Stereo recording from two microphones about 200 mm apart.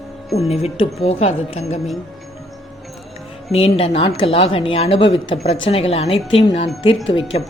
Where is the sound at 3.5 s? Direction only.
30° left (ahead or behind).